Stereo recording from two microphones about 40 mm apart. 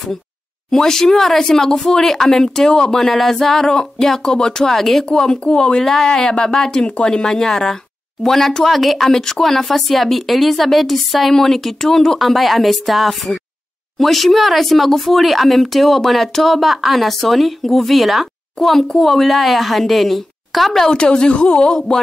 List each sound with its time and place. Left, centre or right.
0.7 s speech: centre
9.1 s speech: centre
12.2 s speech: centre
21.0 s speech: left